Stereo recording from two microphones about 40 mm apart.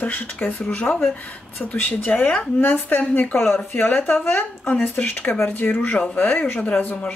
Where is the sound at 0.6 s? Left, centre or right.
Left.